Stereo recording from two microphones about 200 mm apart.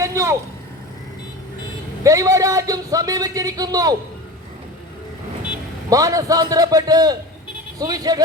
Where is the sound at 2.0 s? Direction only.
15° right (ahead or behind).